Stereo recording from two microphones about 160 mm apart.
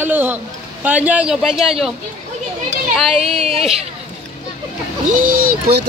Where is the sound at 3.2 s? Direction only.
40° right (ahead or behind).